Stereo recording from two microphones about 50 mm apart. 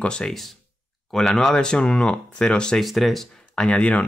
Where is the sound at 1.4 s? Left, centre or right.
Centre.